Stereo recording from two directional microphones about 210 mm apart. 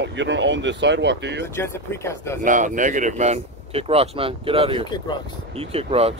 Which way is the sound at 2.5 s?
35° right (ahead or behind).